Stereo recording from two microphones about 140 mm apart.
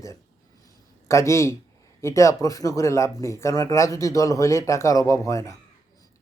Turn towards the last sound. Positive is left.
turn(degrees=20)  # may be behind; listen again after turning